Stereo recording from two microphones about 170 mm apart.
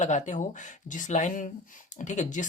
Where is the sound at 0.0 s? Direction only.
45° left (ahead or behind).